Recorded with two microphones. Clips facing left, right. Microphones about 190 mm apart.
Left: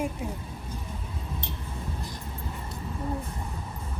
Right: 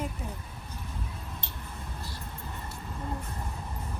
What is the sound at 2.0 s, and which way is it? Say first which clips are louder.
Music: left 3 dB; 15° left (ahead or behind).